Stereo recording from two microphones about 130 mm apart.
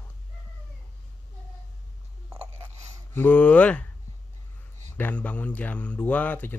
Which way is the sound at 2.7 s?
60° right (ahead or behind).